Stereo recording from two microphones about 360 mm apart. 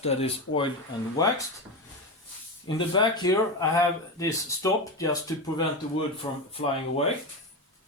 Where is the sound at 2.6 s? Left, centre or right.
Centre.